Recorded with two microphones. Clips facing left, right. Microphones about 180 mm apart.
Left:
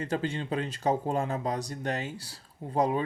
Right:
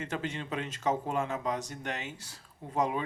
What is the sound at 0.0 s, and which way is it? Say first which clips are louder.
Speech: left 5 dB; 35° left (ahead or behind).